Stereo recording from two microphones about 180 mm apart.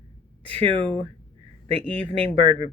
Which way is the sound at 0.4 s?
30° right (ahead or behind).